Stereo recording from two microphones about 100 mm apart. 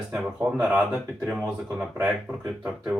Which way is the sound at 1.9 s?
15° right (ahead or behind).